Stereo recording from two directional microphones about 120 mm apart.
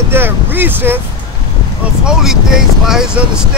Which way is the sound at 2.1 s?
5° right (ahead or behind).